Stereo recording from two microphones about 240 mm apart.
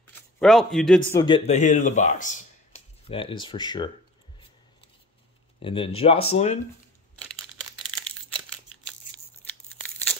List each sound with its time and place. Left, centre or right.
0.0 s a sound: centre
1.1 s speech: centre
5.6 s speech: left